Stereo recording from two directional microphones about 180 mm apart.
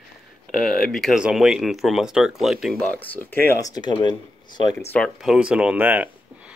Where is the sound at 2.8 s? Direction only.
10° left (ahead or behind).